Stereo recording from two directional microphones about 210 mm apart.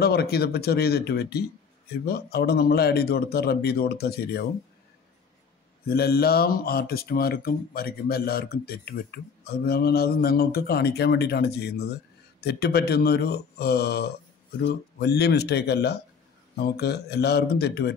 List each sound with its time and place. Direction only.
0.0 s speech: 50° left (ahead or behind)
5.9 s speech: 45° left (ahead or behind)